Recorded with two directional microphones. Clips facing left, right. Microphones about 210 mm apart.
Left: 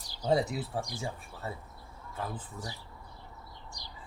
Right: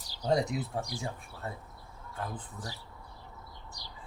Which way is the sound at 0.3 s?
5° left (ahead or behind).